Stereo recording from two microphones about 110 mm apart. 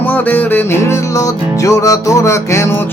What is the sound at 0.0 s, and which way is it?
Music, 15° left (ahead or behind).